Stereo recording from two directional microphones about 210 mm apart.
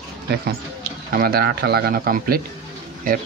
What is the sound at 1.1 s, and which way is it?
Speech, 45° right (ahead or behind).